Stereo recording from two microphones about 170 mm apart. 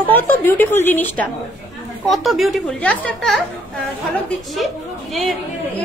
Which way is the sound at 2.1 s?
Centre (ahead or behind).